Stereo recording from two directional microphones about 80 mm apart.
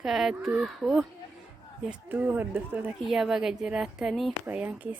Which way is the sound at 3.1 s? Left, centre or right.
Centre.